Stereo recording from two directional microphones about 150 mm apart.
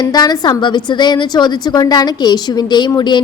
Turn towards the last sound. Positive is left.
turn(degrees=30)  # may be behind; listen again after turning